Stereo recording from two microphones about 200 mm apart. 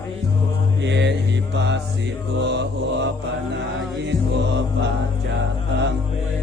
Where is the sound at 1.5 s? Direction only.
60° right (ahead or behind).